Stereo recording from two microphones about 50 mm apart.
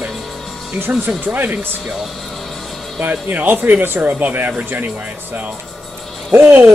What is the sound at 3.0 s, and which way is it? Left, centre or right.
Speech, right.